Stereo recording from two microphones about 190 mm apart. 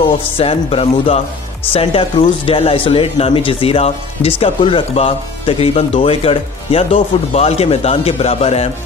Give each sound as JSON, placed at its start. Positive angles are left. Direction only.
{"t": 0.4, "sound": "speech", "side_deg": 30}